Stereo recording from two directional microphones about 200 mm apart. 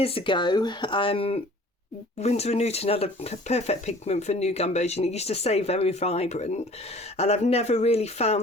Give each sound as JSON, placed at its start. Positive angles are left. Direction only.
{"t": 0.0, "sound": "speech", "side_deg": 25}